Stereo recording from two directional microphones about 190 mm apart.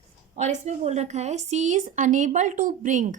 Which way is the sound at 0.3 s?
35° right (ahead or behind).